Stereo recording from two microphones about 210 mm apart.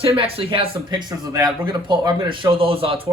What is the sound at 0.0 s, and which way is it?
A man's voice, 25° right (ahead or behind).